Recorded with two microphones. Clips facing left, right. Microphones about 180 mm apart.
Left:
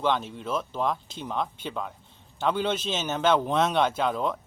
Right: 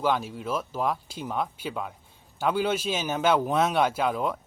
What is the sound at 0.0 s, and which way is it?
Speech, 5° right (ahead or behind).